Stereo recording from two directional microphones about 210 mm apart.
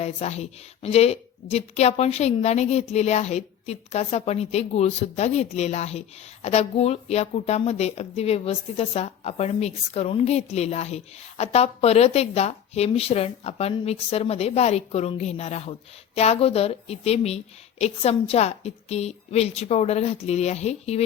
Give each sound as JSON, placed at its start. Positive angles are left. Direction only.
{"t": 0.0, "sound": "a woman's voice", "side_deg": 30}